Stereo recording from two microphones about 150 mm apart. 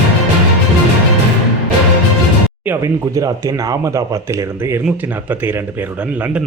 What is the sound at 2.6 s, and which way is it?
A man's voice, 15° right (ahead or behind).